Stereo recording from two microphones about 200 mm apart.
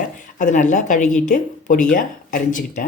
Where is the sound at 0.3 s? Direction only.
40° left (ahead or behind).